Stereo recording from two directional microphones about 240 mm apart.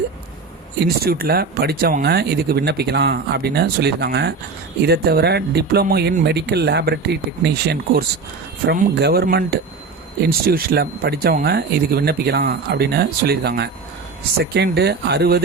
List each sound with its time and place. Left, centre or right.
0.8 s speech: right